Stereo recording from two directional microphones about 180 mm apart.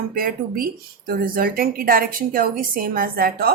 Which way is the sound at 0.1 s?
55° right (ahead or behind).